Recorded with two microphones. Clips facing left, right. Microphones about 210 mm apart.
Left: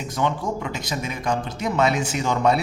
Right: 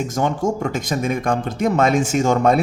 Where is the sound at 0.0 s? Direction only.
45° right (ahead or behind).